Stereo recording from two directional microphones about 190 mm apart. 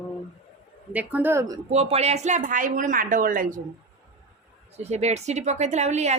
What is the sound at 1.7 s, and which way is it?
Speech, 35° right (ahead or behind).